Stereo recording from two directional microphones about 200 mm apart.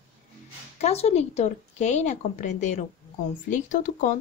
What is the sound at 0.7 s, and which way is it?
A woman's voice, 30° left (ahead or behind).